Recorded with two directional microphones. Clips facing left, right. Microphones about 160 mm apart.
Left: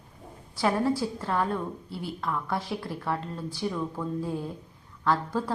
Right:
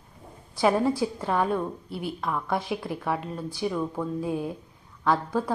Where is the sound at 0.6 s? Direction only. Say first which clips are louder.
Right 3 dB; 20° right (ahead or behind).